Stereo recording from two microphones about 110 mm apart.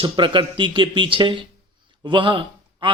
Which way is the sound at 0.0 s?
50° right (ahead or behind).